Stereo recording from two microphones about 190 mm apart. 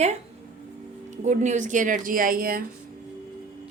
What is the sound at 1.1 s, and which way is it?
Speech, 40° right (ahead or behind).